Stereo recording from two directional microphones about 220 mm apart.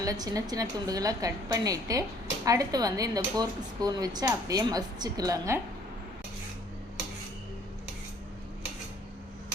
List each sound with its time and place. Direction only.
0.0 s a woman's voice: 15° right (ahead or behind)